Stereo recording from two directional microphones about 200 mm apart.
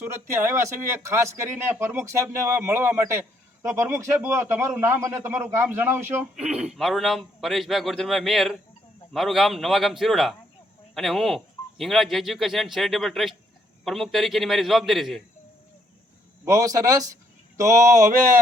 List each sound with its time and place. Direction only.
0.0 s a man's voice: 15° right (ahead or behind)
16.5 s a man's voice: 15° right (ahead or behind)